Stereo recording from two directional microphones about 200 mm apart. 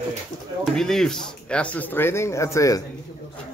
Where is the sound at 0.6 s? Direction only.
Centre (ahead or behind).